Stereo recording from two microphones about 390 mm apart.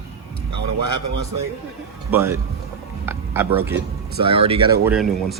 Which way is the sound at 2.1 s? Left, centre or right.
Centre.